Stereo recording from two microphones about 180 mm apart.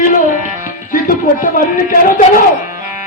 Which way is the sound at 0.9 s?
50° left (ahead or behind).